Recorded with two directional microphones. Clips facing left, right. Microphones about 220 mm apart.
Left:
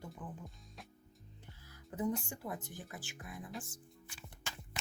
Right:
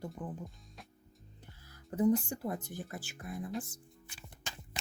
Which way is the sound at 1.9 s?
40° right (ahead or behind).